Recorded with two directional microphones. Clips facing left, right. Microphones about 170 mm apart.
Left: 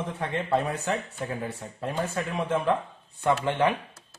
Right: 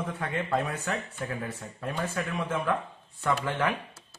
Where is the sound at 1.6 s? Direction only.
25° left (ahead or behind).